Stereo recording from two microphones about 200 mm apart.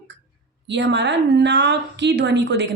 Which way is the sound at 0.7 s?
60° right (ahead or behind).